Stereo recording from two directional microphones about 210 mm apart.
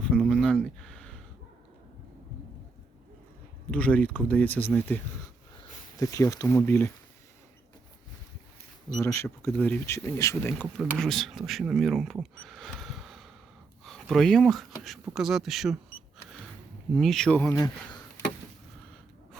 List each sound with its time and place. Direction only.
0.0 s a sound: centre (ahead or behind)
3.7 s speech: 5° left (ahead or behind)
6.0 s speech: 15° left (ahead or behind)
9.0 s speech: 15° left (ahead or behind)
10.8 s speech: centre (ahead or behind)
12.4 s a sound: centre (ahead or behind)
13.8 s speech: centre (ahead or behind)
16.9 s speech: centre (ahead or behind)